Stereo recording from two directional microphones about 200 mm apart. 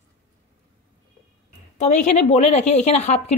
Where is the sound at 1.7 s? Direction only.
35° left (ahead or behind).